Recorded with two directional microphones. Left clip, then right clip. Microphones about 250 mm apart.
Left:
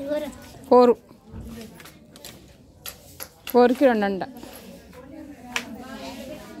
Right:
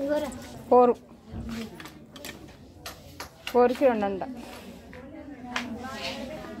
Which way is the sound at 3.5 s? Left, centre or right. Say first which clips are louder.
Left 4 dB; left.